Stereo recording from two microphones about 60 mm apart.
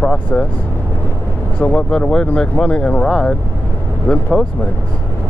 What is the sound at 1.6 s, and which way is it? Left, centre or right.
Speech, left.